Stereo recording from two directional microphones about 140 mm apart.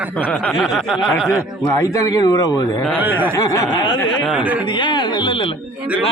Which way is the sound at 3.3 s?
25° left (ahead or behind).